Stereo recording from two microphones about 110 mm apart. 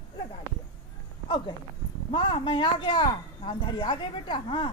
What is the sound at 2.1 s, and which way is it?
Speech, 50° left (ahead or behind).